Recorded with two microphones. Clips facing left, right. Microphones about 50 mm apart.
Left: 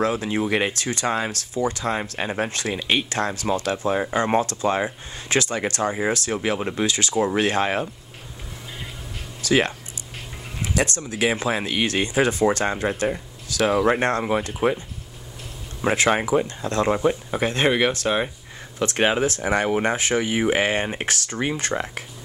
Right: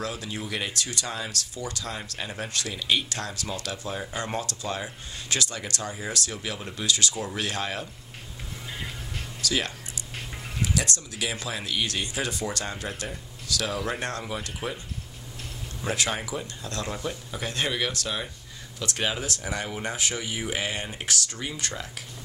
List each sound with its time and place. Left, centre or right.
0.0 s speech: left
9.4 s speech: left
15.8 s speech: left